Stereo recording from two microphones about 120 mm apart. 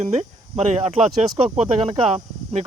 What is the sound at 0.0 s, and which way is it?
Speech, 65° right (ahead or behind).